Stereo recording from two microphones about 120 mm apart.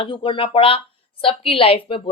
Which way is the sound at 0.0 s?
45° left (ahead or behind).